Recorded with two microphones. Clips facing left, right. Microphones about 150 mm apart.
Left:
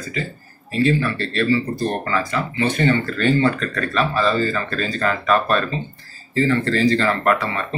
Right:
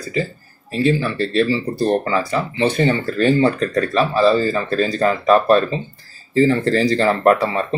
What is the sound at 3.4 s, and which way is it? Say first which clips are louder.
Speech: right 4 dB; 35° right (ahead or behind).